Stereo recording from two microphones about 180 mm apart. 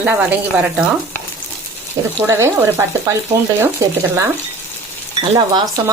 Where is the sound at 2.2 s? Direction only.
15° right (ahead or behind).